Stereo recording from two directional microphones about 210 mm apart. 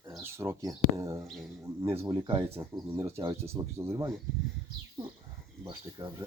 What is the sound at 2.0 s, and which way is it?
Speech, 20° right (ahead or behind).